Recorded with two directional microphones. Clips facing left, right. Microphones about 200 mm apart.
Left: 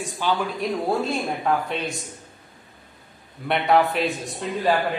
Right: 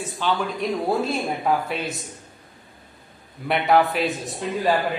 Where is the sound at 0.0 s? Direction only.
10° left (ahead or behind).